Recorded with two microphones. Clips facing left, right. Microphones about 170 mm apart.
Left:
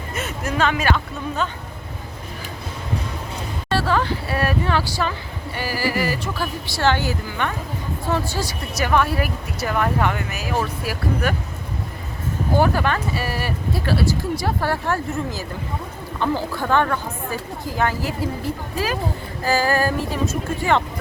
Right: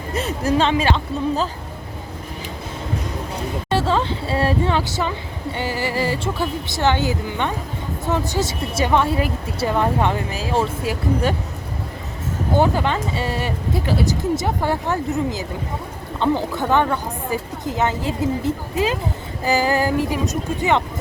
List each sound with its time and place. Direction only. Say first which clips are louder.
0.1 s speech: right 7 dB; 30° right (ahead or behind)
3.7 s speech: even; 20° right (ahead or behind)
12.5 s speech: right 1 dB; 20° right (ahead or behind)